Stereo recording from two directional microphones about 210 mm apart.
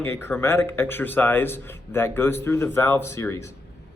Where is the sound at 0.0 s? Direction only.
10° left (ahead or behind).